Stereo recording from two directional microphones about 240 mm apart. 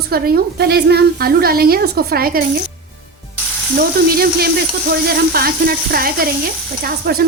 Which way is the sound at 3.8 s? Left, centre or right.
Right.